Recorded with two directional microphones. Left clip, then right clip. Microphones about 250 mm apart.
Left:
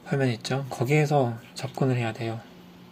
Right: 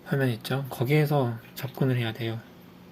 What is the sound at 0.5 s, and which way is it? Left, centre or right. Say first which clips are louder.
Speech: left 1 dB; centre.